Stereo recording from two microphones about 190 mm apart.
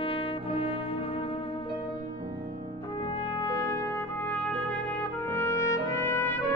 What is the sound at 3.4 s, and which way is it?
Trumpet, 20° left (ahead or behind).